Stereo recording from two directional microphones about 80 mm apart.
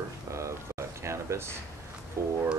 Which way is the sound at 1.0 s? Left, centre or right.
Right.